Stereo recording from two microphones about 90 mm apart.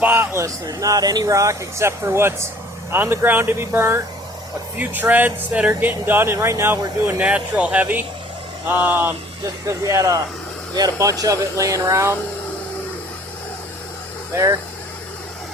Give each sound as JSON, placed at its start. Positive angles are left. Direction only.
{"t": 0.0, "sound": "speech", "side_deg": -25}
{"t": 7.3, "sound": "speech", "side_deg": -15}
{"t": 9.4, "sound": "speech", "side_deg": -35}
{"t": 11.2, "sound": "speech", "side_deg": -35}
{"t": 14.3, "sound": "speech", "side_deg": -30}